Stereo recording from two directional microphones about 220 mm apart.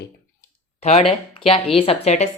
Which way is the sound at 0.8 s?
30° left (ahead or behind).